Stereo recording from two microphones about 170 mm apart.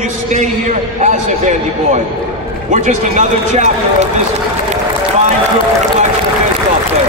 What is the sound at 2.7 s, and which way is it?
Speech, 45° right (ahead or behind).